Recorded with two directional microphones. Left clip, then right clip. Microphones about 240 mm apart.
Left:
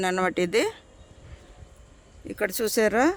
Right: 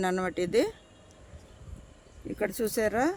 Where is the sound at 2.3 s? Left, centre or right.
Left.